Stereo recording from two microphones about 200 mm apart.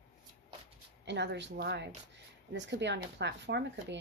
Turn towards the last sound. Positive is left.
turn(degrees=-60)  # may be behind; listen again after turning